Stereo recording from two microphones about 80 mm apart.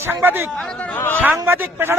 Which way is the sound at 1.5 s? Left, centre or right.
Right.